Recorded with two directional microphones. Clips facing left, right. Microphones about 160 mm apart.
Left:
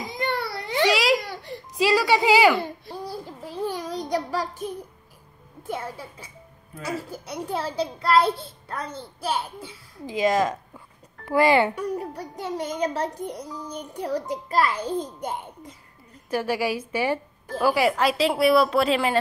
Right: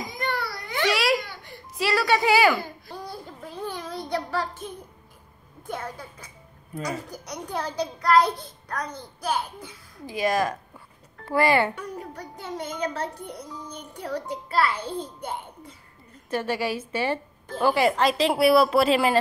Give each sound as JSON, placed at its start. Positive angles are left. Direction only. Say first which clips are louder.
{"t": 0.2, "sound": "a sound", "louder": "left 3 dB", "side_deg": 25}
{"t": 0.8, "sound": "a sound", "louder": "left 2 dB", "side_deg": 15}
{"t": 1.2, "sound": "crying", "louder": "left 6 dB", "side_deg": 35}
{"t": 1.8, "sound": "music", "louder": "left 3 dB", "side_deg": 15}
{"t": 2.6, "sound": "babbling", "louder": "left 4 dB", "side_deg": 30}
{"t": 3.3, "sound": "a sound", "louder": "left 5 dB", "side_deg": 10}
{"t": 4.0, "sound": "child singing", "louder": "left 1 dB", "side_deg": 10}
{"t": 5.7, "sound": "a child's voice", "louder": "left 2 dB", "side_deg": 5}
{"t": 7.4, "sound": "a child's voice", "louder": "left 2 dB", "side_deg": 30}
{"t": 12.7, "sound": "a child's voice", "louder": "left 3 dB", "side_deg": 35}
{"t": 13.2, "sound": "a child's voice", "louder": "left 4 dB", "side_deg": 10}